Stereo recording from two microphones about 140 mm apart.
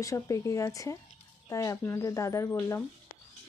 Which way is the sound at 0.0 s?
20° left (ahead or behind).